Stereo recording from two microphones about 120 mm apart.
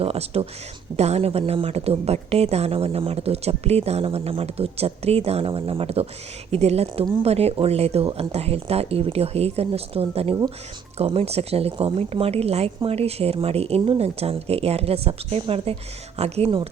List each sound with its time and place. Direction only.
0.0 s speech: 55° right (ahead or behind)